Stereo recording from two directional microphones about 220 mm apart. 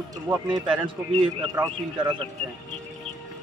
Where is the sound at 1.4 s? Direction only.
20° right (ahead or behind).